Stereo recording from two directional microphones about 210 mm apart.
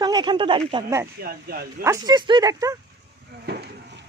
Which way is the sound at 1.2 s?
45° right (ahead or behind).